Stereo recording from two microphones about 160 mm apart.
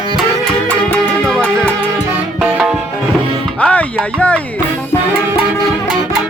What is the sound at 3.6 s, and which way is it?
Speech, 10° left (ahead or behind).